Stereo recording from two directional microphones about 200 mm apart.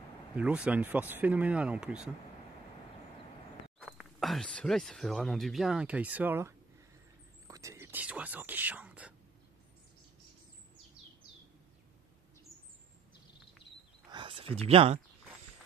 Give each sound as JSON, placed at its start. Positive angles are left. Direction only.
{"t": 0.4, "sound": "speech", "side_deg": -5}
{"t": 3.8, "sound": "speech", "side_deg": 0}
{"t": 14.1, "sound": "a sound", "side_deg": -25}